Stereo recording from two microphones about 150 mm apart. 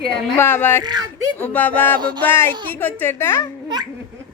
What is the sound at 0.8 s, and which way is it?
Speech, 25° right (ahead or behind).